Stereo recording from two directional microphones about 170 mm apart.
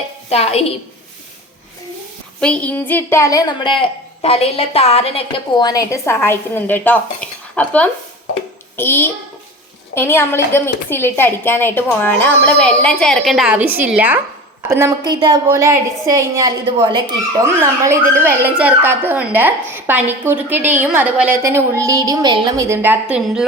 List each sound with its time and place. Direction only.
0.3 s a woman's voice: 35° left (ahead or behind)
2.4 s a woman's voice: 5° left (ahead or behind)